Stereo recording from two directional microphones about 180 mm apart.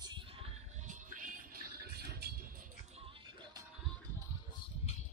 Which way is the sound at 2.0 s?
60° right (ahead or behind).